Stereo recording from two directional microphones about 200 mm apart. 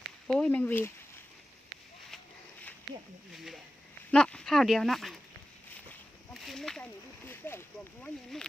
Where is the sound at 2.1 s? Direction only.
Centre (ahead or behind).